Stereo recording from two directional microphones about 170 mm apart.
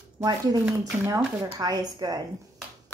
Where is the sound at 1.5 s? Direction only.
20° right (ahead or behind).